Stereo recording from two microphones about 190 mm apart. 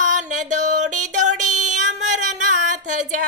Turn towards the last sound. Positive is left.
turn(degrees=-40)  # may be behind; listen again after turning